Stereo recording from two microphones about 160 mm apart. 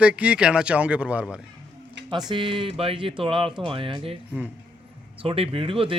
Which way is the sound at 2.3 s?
30° right (ahead or behind).